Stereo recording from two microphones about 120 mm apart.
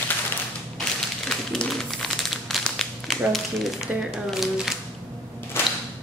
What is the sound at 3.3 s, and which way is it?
Speech, centre (ahead or behind).